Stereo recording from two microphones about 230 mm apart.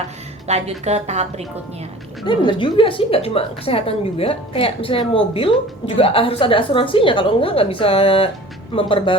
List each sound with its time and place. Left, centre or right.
0.4 s a woman's voice: right
2.2 s speech: left